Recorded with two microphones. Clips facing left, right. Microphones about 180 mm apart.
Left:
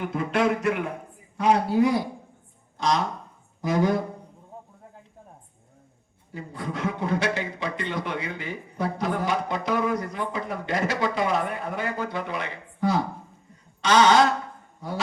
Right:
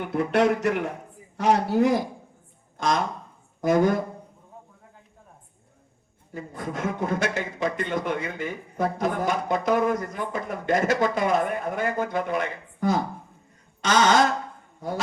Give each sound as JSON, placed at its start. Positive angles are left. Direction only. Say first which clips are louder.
{"t": 0.0, "sound": "a man's voice", "louder": "right 2 dB", "side_deg": -65}
{"t": 2.7, "sound": "a man's voice", "louder": "even", "side_deg": -50}
{"t": 6.3, "sound": "a man's voice", "louder": "right 1 dB", "side_deg": -45}